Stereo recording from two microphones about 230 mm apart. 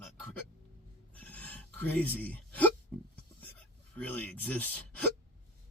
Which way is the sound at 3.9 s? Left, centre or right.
Centre.